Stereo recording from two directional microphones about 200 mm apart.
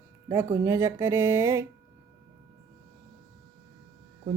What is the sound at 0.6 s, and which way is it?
Speech, 15° right (ahead or behind).